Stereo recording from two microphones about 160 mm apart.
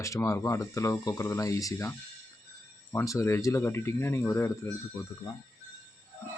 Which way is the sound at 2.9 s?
20° left (ahead or behind).